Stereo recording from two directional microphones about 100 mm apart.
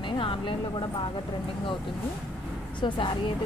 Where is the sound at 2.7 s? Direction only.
55° left (ahead or behind).